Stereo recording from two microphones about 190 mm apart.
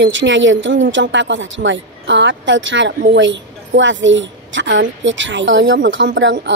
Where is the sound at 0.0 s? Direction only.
75° right (ahead or behind).